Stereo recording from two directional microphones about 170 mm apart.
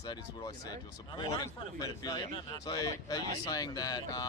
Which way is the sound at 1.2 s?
20° left (ahead or behind).